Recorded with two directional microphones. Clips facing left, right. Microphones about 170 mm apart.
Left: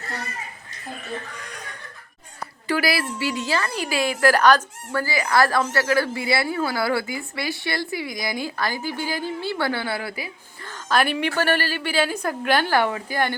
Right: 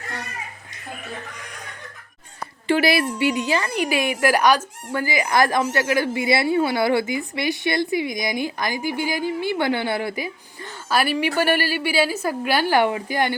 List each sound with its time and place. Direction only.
2.6 s a woman's voice: 25° right (ahead or behind)
10.8 s a woman's voice: 5° right (ahead or behind)